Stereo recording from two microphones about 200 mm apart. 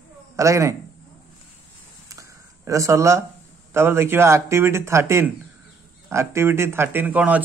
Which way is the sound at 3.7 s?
10° right (ahead or behind).